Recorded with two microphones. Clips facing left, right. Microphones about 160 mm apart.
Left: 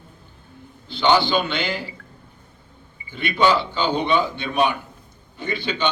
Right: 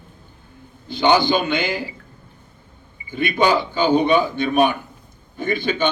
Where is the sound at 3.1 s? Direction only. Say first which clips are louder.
Right 1 dB; 45° right (ahead or behind).